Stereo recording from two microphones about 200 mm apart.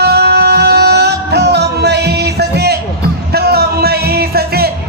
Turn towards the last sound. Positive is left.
turn(degrees=-50)  # may be behind; listen again after turning